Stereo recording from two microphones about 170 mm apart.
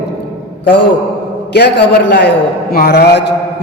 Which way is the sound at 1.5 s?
80° left.